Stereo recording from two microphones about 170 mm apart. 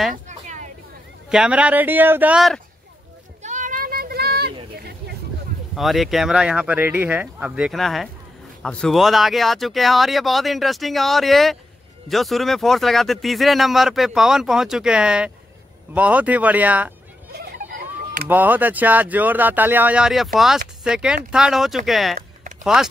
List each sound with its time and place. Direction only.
0.1 s a sound: 45° right (ahead or behind)
1.3 s speech: 5° right (ahead or behind)
3.4 s a sound: 50° right (ahead or behind); by 4.6 s 70° right (ahead or behind)
5.8 s speech: centre (ahead or behind)
17.3 s vehicle: 70° right (ahead or behind)
18.3 s speech: 10° right (ahead or behind)